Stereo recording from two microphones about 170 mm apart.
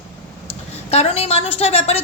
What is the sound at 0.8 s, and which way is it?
A woman's voice, 35° left (ahead or behind).